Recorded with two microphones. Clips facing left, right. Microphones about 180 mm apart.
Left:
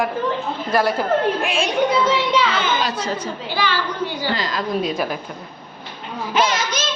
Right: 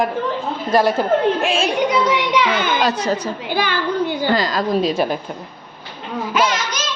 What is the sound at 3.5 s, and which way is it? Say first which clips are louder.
A woman's voice: right 3 dB; 55° right (ahead or behind).